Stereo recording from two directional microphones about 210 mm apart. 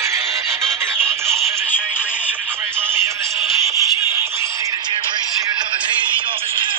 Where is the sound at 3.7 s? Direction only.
15° right (ahead or behind).